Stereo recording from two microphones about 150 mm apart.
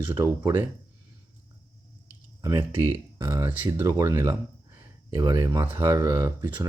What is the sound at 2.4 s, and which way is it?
Speech, 20° right (ahead or behind).